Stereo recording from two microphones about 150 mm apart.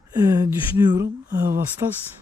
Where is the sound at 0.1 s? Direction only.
25° right (ahead or behind).